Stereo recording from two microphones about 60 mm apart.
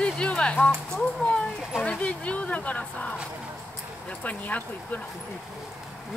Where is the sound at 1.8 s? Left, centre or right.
Left.